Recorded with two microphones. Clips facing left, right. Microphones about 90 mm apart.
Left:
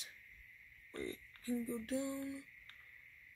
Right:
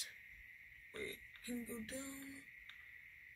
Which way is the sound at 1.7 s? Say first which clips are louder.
Left 9 dB; 70° left (ahead or behind).